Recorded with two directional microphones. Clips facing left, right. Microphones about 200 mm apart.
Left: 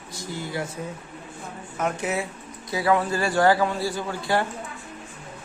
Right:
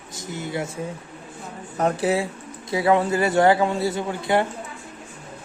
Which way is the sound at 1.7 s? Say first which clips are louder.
Right 5 dB; 35° right (ahead or behind).